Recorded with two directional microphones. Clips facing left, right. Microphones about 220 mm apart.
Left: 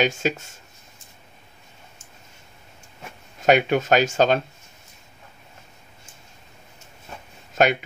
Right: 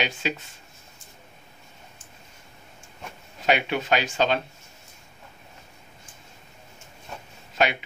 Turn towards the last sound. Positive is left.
turn(degrees=45)  # may be behind; listen again after turning